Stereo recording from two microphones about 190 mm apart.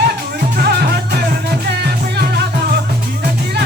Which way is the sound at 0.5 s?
55° right (ahead or behind).